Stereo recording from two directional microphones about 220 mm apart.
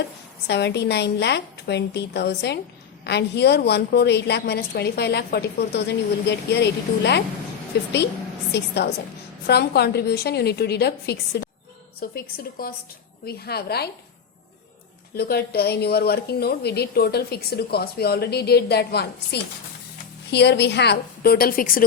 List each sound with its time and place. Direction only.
0.4 s a woman's voice: 50° left (ahead or behind)
8.5 s a woman's voice: 50° left (ahead or behind)
15.1 s a woman's voice: 45° left (ahead or behind)